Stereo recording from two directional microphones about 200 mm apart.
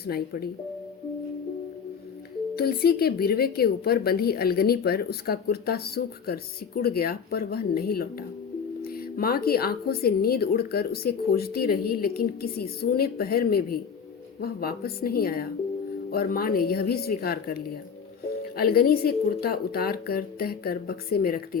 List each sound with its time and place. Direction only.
2.6 s a woman's voice: 50° left (ahead or behind)